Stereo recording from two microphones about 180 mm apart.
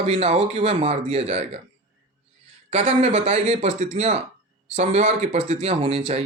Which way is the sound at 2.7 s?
40° right (ahead or behind).